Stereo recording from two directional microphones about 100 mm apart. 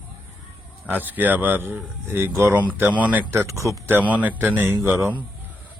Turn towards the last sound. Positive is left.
turn(degrees=-25)  # may be behind; listen again after turning